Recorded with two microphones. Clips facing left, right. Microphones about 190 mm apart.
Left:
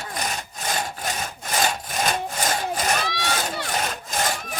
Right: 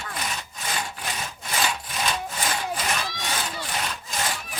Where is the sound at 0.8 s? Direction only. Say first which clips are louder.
Left 3 dB; 45° left (ahead or behind).